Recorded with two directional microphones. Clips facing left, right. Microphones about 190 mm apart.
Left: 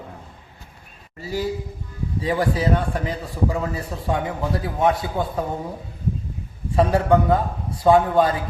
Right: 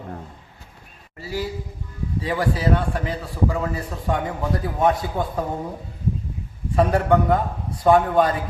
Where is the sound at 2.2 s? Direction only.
15° left (ahead or behind).